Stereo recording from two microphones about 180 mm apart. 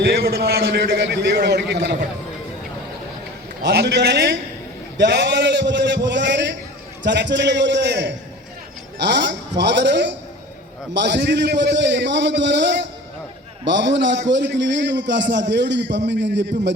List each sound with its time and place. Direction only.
0.0 s a man's voice: 60° right (ahead or behind)
3.6 s a man's voice: 70° right (ahead or behind)